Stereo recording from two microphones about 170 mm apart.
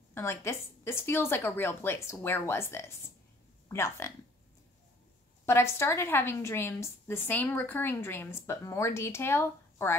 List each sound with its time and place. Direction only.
0.1 s a woman's voice: 15° left (ahead or behind)
5.4 s a woman's voice: 15° left (ahead or behind)